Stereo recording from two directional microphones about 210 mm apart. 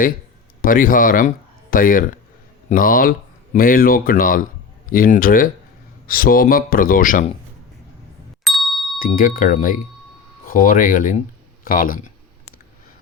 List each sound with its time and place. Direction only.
0.6 s speech: 40° left (ahead or behind)
8.4 s ding: centre (ahead or behind)
9.0 s speech: 40° left (ahead or behind)